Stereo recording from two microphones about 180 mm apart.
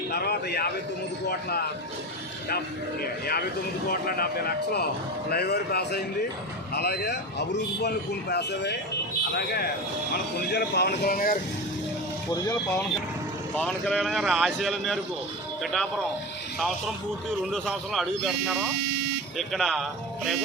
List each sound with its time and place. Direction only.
0.1 s speech: 60° left (ahead or behind)
3.0 s speech: 60° left (ahead or behind)
13.6 s speech: 5° left (ahead or behind)
17.5 s speech: centre (ahead or behind)